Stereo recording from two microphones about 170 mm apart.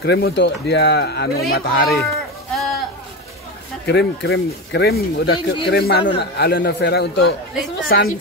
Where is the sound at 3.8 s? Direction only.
70° left (ahead or behind).